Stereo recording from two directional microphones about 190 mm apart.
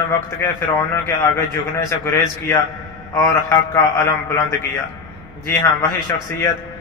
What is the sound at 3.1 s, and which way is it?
Speech, 15° left (ahead or behind).